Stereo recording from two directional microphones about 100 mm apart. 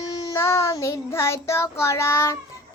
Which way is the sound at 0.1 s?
35° left (ahead or behind).